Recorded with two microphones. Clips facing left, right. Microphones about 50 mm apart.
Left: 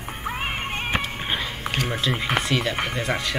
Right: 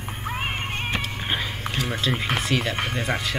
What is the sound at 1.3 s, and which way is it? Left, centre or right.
Music, centre.